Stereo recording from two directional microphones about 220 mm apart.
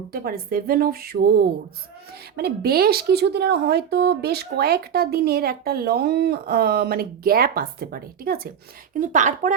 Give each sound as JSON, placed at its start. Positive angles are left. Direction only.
{"t": 0.1, "sound": "a woman's voice", "side_deg": -45}